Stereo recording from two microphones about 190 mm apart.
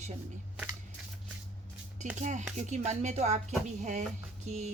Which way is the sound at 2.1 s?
40° right (ahead or behind).